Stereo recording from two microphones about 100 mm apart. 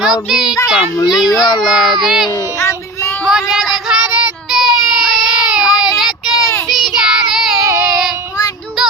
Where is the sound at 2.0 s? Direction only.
5° right (ahead or behind).